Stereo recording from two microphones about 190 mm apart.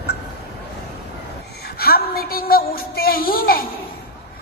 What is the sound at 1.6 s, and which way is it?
A woman's voice, 55° left (ahead or behind).